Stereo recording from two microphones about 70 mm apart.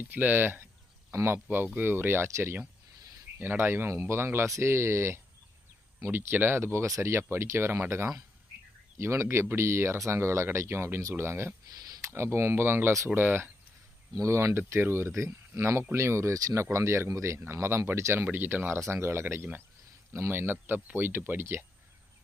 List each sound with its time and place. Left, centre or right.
0.0 s speech: right
13.1 s speech: right
16.7 s speech: right